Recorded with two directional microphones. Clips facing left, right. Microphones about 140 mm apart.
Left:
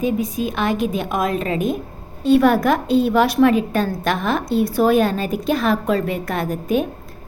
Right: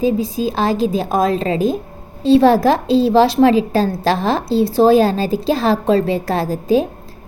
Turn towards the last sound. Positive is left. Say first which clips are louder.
# right 4 dB
turn(degrees=-30)  # may be behind; listen again after turning